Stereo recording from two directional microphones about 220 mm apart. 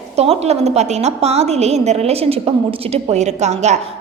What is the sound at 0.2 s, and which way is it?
A woman's voice, 30° right (ahead or behind).